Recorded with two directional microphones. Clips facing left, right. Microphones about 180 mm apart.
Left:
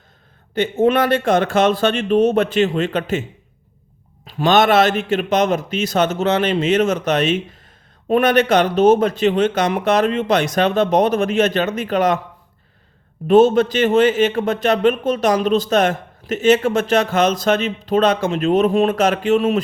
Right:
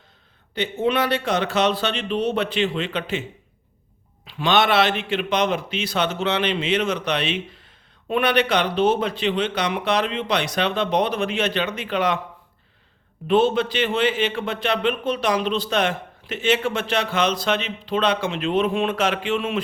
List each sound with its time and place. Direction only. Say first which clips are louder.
0.5 s a man's voice: left 6 dB; 45° left (ahead or behind)
4.3 s a man's voice: left 5 dB; 45° left (ahead or behind)
13.2 s a man's voice: left 7 dB; 45° left (ahead or behind)